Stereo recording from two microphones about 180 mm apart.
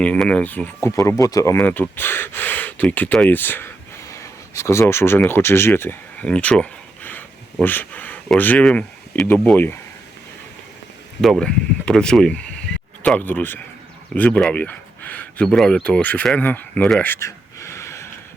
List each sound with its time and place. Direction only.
0.0 s speech: 5° left (ahead or behind)
11.2 s speech: centre (ahead or behind)